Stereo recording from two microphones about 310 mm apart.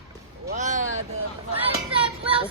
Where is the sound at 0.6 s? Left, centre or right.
Right.